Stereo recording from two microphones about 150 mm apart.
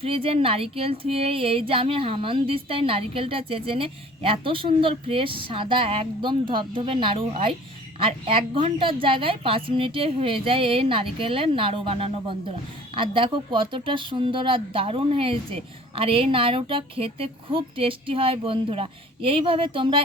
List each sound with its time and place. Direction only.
0.0 s speech: 40° right (ahead or behind)